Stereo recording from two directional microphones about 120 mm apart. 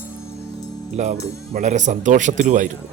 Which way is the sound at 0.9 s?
75° right (ahead or behind).